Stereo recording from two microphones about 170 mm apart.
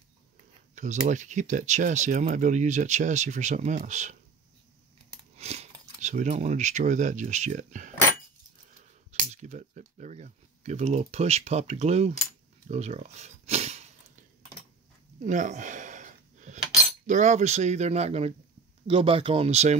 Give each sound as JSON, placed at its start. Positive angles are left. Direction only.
{"t": 1.0, "sound": "speech", "side_deg": -45}
{"t": 5.3, "sound": "a sound", "side_deg": -40}
{"t": 5.9, "sound": "speech", "side_deg": -45}
{"t": 9.3, "sound": "speech", "side_deg": -45}
{"t": 15.2, "sound": "a sound", "side_deg": -45}
{"t": 17.0, "sound": "speech", "side_deg": -45}